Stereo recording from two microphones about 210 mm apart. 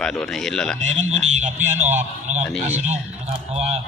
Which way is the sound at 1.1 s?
35° right (ahead or behind).